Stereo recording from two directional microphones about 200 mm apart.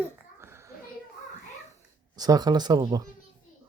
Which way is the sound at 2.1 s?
20° right (ahead or behind).